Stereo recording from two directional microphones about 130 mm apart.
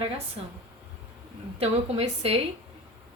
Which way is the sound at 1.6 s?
50° right (ahead or behind).